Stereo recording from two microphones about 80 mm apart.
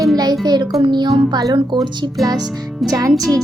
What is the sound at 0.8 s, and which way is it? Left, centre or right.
Music, right.